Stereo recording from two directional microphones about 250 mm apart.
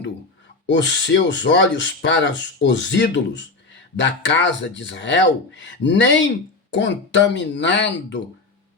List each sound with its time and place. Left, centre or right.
0.7 s speech: left